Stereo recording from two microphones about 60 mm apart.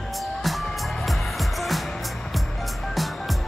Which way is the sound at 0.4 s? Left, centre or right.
Centre.